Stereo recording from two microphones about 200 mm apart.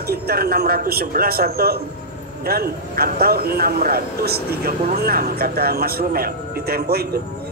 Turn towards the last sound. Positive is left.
turn(degrees=-50)  # may be behind; listen again after turning